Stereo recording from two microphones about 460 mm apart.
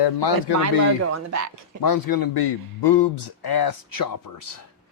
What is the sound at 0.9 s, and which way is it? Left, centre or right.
Speech, right.